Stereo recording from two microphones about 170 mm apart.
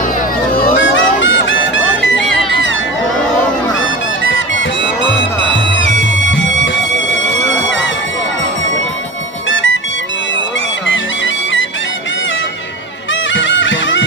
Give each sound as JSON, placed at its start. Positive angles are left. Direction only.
{"t": 0.9, "sound": "music", "side_deg": 90}
{"t": 2.5, "sound": "a sound", "side_deg": 90}
{"t": 4.2, "sound": "music", "side_deg": 90}
{"t": 6.0, "sound": "music", "side_deg": 90}
{"t": 7.2, "sound": "music", "side_deg": -45}
{"t": 9.5, "sound": "music", "side_deg": 90}
{"t": 13.3, "sound": "music", "side_deg": 90}